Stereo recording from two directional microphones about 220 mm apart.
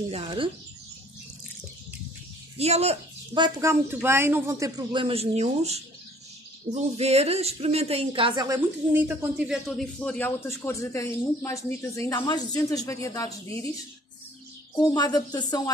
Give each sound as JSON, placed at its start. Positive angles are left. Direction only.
{"t": 0.1, "sound": "speech", "side_deg": -25}
{"t": 2.6, "sound": "speech", "side_deg": -30}
{"t": 8.9, "sound": "a man's voice", "side_deg": -10}
{"t": 15.0, "sound": "a man's voice", "side_deg": 15}